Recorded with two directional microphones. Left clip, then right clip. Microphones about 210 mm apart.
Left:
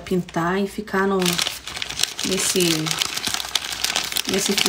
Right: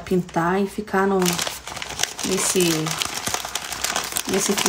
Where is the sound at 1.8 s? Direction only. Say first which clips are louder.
Left 2 dB; centre (ahead or behind).